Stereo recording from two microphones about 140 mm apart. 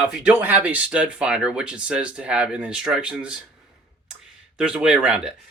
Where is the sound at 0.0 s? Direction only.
10° right (ahead or behind).